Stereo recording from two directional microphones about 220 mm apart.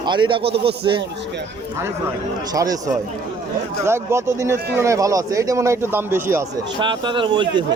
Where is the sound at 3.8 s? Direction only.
10° right (ahead or behind).